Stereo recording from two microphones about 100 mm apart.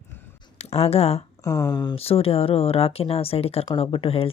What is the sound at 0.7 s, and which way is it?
Speech, 90° left.